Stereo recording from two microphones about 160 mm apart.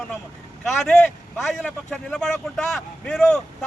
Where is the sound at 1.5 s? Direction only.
Centre (ahead or behind).